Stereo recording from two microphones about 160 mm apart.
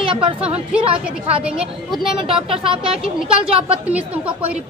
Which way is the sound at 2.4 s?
35° right (ahead or behind).